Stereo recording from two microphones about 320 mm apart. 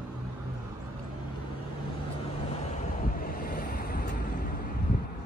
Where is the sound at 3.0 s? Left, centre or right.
Left.